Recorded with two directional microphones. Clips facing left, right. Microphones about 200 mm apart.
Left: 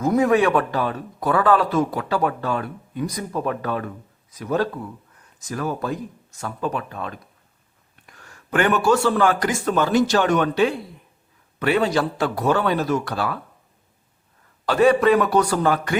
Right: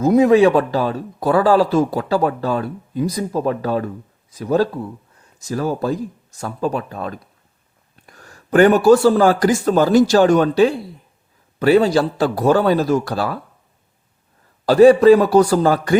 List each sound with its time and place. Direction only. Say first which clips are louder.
0.0 s speech: right 6 dB; 25° right (ahead or behind)
14.7 s speech: right 7 dB; 35° right (ahead or behind)